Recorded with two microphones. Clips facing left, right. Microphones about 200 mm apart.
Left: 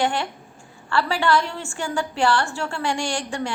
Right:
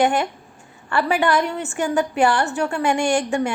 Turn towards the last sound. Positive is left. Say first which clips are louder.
# right 7 dB
turn(degrees=-20)  # may be behind; listen again after turning